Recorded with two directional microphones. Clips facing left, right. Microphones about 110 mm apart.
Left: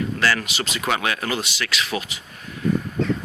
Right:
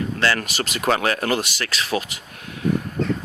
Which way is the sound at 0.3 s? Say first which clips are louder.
Right 1 dB; 45° right (ahead or behind).